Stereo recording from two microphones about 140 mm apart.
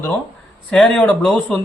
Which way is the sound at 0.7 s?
10° left (ahead or behind).